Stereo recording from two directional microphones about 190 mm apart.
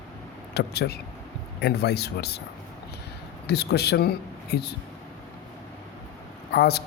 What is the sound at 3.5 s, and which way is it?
Speech, 60° left (ahead or behind).